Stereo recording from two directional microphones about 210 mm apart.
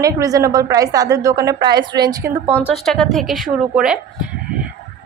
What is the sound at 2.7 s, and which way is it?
A woman's voice, centre (ahead or behind).